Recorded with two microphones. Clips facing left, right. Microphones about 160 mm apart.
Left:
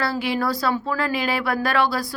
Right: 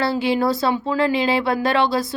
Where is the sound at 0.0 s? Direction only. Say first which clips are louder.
Right 4 dB; 25° right (ahead or behind).